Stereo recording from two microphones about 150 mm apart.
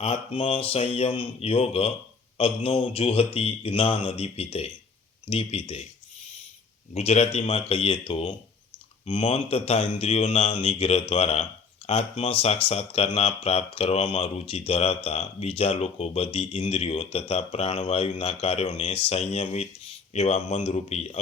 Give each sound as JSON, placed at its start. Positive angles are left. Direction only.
{"t": 0.0, "sound": "speech", "side_deg": 40}
{"t": 6.9, "sound": "speech", "side_deg": 45}